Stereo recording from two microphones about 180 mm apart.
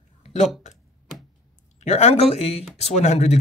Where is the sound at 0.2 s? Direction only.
40° left (ahead or behind).